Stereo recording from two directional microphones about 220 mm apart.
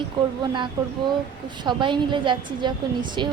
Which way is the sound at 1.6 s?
20° right (ahead or behind).